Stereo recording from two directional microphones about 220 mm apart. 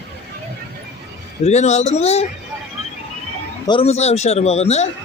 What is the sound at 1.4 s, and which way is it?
Speech, 30° left (ahead or behind).